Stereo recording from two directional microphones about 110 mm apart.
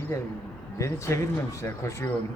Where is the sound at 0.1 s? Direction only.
25° left (ahead or behind).